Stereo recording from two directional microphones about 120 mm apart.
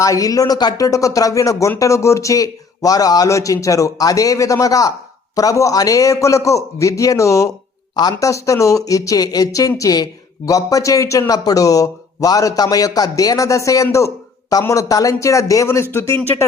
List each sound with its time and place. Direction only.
0.0 s speech: 30° left (ahead or behind)